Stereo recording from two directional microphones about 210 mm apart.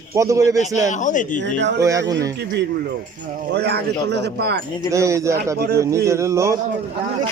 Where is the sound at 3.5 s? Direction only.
50° right (ahead or behind).